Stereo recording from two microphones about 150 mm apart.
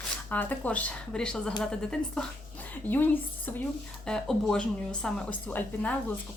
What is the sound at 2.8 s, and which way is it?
Speech, 15° left (ahead or behind).